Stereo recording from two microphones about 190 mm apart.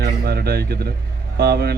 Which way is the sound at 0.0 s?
55° right (ahead or behind).